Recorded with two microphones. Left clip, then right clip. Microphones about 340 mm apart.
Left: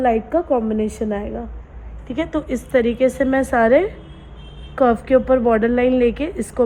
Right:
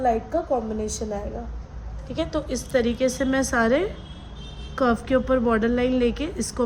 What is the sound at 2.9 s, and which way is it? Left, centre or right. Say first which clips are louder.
A woman's voice: left 6 dB; centre.